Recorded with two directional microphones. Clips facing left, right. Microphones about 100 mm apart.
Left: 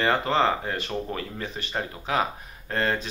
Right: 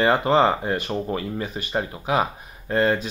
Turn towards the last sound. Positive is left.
turn(degrees=-15)  # may be behind; listen again after turning